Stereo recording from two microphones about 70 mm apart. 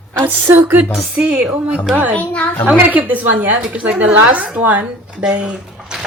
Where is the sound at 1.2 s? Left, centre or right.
Centre.